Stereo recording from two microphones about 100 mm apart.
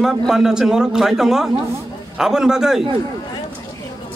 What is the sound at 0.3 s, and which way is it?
A man's voice, 5° right (ahead or behind).